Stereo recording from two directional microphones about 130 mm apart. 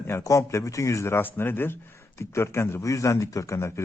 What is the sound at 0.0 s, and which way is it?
Speech, 20° left (ahead or behind).